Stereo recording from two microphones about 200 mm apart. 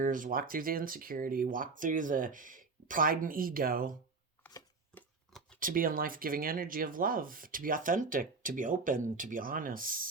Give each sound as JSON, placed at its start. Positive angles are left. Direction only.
{"t": 0.0, "sound": "speech", "side_deg": -40}
{"t": 4.9, "sound": "scissors", "side_deg": 5}
{"t": 5.5, "sound": "speech", "side_deg": -45}